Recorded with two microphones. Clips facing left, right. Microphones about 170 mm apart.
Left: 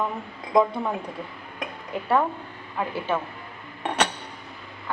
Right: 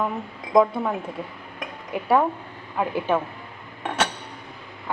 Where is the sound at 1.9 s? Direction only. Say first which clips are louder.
Right 3 dB; 10° right (ahead or behind).